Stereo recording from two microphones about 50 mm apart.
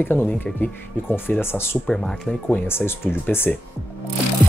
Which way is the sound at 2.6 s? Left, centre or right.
Left.